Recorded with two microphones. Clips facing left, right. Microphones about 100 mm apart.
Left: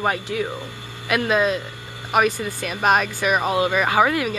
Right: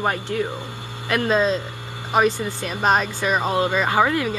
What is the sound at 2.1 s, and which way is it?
Speech, 20° right (ahead or behind).